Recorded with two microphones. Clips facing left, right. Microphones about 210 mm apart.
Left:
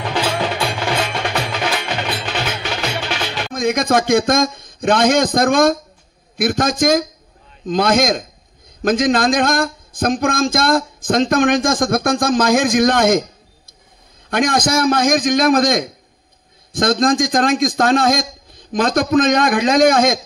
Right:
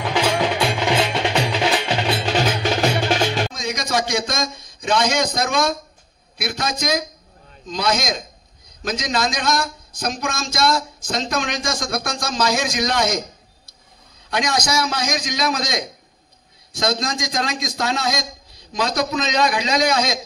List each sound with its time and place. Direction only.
0.7 s wood block: 20° right (ahead or behind); by 3.5 s 45° right (ahead or behind)
3.5 s a man's voice: 55° left (ahead or behind)
14.3 s speech: 50° left (ahead or behind)